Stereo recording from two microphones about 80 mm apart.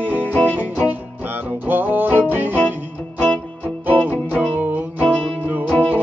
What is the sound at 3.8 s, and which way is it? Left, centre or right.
Music, right.